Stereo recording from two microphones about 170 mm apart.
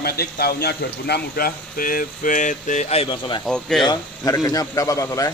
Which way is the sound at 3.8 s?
20° left (ahead or behind).